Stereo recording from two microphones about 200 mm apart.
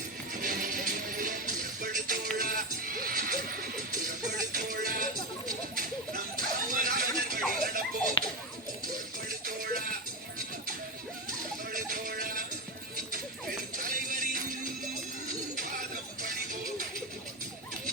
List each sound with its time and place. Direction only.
0.4 s music: 45° right (ahead or behind)
9.5 s music: 45° right (ahead or behind)
11.7 s music: 45° right (ahead or behind)
13.7 s music: 45° right (ahead or behind)